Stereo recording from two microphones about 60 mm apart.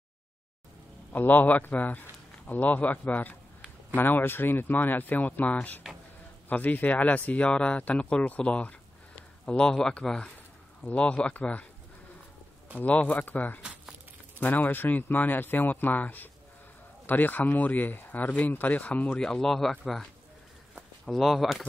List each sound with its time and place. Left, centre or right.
1.1 s speech: left
12.7 s speech: left
13.6 s crumpling: centre
14.4 s speech: left
19.0 s speech: centre